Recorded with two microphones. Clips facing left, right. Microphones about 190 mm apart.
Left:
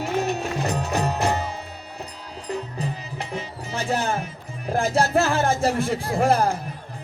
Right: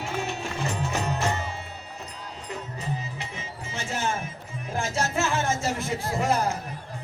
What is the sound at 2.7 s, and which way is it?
Music, 35° left (ahead or behind).